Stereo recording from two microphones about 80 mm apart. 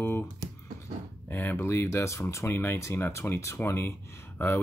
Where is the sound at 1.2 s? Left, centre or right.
Left.